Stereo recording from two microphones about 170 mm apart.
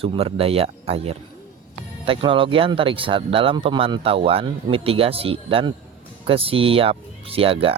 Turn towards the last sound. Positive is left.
turn(degrees=-35)  # may be behind; listen again after turning